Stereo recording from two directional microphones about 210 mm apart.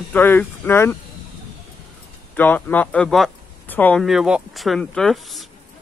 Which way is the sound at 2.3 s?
10° left (ahead or behind).